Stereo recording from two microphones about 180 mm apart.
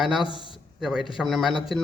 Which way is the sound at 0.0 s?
5° right (ahead or behind).